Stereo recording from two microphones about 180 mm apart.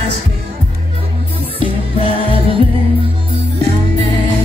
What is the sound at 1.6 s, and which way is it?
Music, 30° right (ahead or behind).